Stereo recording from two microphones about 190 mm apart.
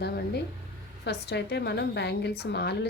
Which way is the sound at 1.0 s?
60° left (ahead or behind).